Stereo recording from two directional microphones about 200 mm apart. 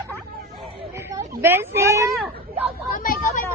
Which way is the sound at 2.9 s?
45° left (ahead or behind).